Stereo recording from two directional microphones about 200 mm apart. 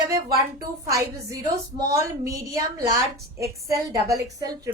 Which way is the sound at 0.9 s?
15° right (ahead or behind).